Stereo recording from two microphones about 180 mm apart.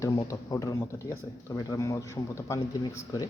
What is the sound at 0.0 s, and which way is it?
Speech, 15° left (ahead or behind).